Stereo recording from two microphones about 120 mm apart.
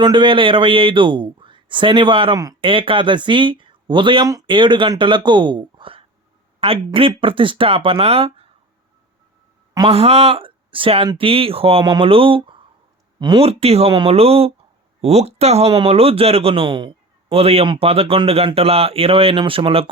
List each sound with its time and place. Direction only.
0.0 s a man's voice: 40° right (ahead or behind)
9.9 s a man's voice: 55° right (ahead or behind); by 13.4 s 40° right (ahead or behind)
13.4 s speech: 55° right (ahead or behind)
15.7 s a man's voice: 50° right (ahead or behind)